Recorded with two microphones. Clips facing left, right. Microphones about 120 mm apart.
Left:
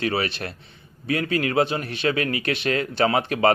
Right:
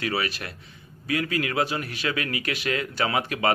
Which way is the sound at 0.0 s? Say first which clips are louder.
Left 3 dB; 25° left (ahead or behind).